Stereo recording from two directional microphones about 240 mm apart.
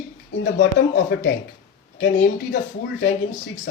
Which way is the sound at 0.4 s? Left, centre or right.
Left.